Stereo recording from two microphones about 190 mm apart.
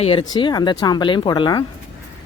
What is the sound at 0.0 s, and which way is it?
Speech, 30° left (ahead or behind).